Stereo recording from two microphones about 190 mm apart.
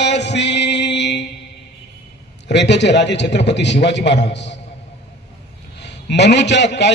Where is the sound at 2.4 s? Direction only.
65° left (ahead or behind).